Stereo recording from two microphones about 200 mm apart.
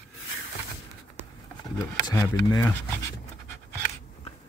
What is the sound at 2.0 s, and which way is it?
Speech, 15° left (ahead or behind).